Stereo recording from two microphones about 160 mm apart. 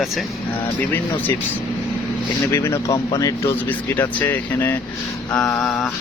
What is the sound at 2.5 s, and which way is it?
Speech, 15° left (ahead or behind).